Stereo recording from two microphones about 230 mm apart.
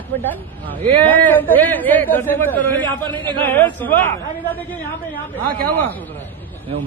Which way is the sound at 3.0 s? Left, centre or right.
Right.